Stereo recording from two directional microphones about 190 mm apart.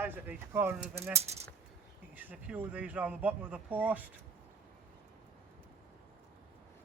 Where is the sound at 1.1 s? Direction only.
35° right (ahead or behind).